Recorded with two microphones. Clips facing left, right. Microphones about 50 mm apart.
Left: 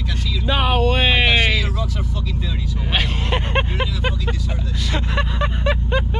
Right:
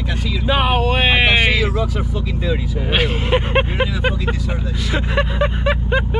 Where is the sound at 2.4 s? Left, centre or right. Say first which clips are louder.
Right 6 dB; centre.